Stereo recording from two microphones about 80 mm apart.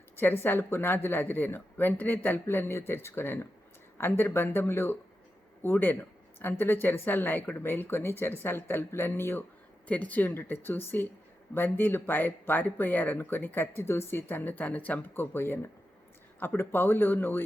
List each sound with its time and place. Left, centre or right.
0.2 s speech: left